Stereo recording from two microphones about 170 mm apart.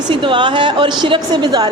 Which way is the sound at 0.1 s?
30° right (ahead or behind).